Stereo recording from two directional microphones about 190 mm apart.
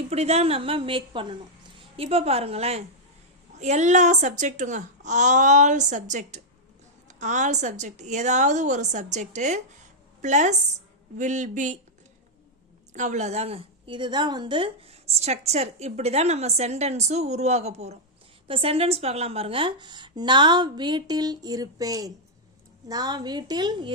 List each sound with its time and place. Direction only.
0.1 s a woman's voice: 35° right (ahead or behind)
12.9 s a woman's voice: 40° right (ahead or behind); by 23.9 s 20° right (ahead or behind)